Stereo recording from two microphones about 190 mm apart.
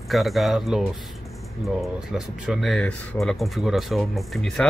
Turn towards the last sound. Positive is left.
turn(degrees=0)  # may be behind; listen again after turning